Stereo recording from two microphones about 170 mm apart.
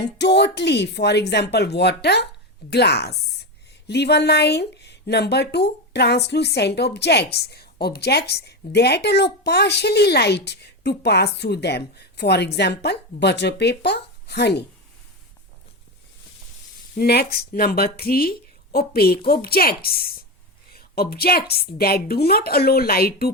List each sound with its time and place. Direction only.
0.0 s speech: 80° left
17.0 s a woman's voice: 70° left (ahead or behind)